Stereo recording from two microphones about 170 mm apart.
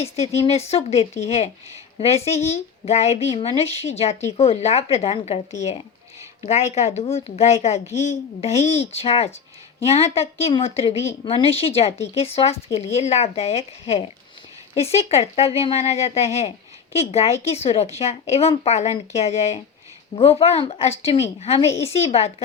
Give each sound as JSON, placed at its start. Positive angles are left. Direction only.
{"t": 0.0, "sound": "a woman's voice", "side_deg": 40}